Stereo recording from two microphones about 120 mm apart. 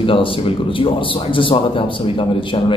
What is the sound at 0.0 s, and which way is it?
A man's voice, 50° left (ahead or behind).